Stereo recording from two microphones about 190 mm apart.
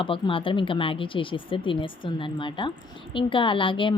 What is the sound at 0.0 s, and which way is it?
A woman's voice, 25° left (ahead or behind).